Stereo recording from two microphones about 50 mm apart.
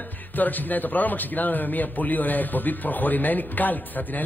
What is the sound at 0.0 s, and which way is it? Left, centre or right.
Speech, left.